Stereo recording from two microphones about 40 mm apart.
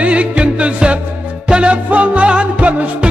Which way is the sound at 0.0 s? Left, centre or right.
Right.